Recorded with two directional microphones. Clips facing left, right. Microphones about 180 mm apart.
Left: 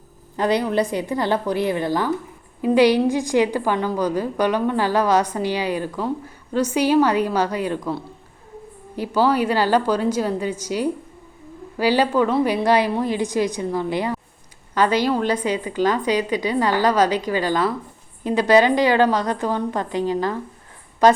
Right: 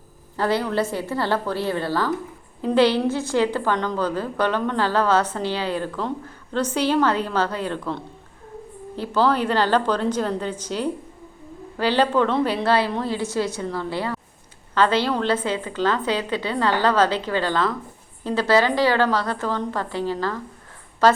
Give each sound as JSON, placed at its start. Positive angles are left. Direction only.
{"t": 0.3, "sound": "a woman's voice", "side_deg": 15}